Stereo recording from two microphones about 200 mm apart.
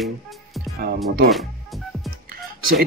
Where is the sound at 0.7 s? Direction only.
50° right (ahead or behind).